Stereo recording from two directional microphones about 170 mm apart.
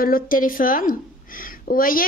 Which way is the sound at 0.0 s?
55° left (ahead or behind).